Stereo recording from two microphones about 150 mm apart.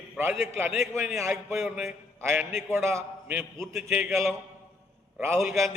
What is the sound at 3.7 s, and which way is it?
Speech, centre (ahead or behind).